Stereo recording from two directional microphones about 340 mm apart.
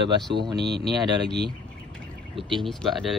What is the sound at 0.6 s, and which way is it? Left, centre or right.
Speech, right.